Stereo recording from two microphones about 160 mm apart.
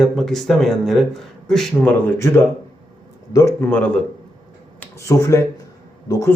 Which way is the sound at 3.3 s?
20° left (ahead or behind).